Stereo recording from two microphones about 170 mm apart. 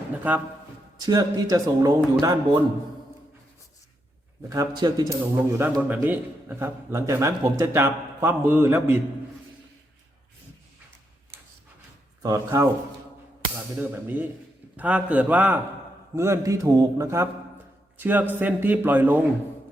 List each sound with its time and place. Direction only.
0.2 s a man's voice: 10° right (ahead or behind)
0.9 s a man's voice: 20° right (ahead or behind)
4.4 s a man's voice: 20° right (ahead or behind)
12.2 s a man's voice: 20° right (ahead or behind)
13.7 s a man's voice: 10° right (ahead or behind)